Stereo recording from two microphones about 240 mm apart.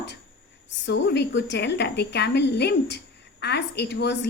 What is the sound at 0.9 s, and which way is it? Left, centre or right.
A woman's voice, left.